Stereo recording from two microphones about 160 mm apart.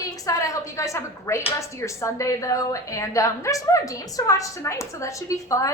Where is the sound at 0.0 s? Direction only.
20° left (ahead or behind).